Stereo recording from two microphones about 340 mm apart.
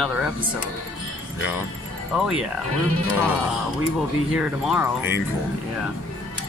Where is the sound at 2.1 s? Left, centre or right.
Centre.